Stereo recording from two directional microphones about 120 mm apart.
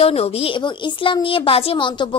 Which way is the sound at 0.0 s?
55° left (ahead or behind).